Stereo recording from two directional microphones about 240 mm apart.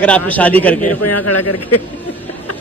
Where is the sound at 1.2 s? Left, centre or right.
Left.